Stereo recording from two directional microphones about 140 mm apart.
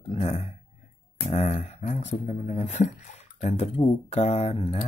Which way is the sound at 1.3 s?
50° left (ahead or behind).